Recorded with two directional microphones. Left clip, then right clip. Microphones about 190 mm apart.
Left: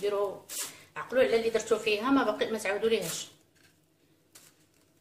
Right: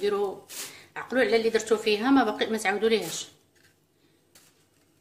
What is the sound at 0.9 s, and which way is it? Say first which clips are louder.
Speech: right 2 dB; 50° right (ahead or behind).